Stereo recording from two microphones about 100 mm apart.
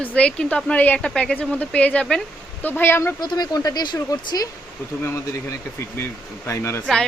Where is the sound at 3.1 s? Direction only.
45° left (ahead or behind).